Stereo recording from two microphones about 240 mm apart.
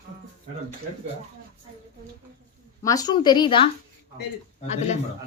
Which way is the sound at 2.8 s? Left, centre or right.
Centre.